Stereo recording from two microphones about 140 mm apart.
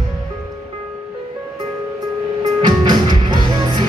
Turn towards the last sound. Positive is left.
turn(degrees=-30)  # may be behind; listen again after turning